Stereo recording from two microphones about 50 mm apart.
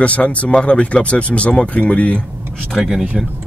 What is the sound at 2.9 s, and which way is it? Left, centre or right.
Speech, centre.